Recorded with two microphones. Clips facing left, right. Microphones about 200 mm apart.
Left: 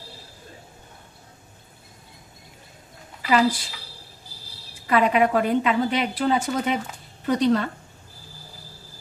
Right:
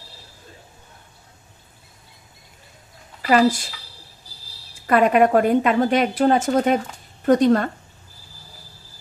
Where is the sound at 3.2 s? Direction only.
50° right (ahead or behind).